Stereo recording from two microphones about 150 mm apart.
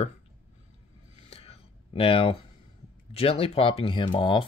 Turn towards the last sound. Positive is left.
turn(degrees=35)  # may be behind; listen again after turning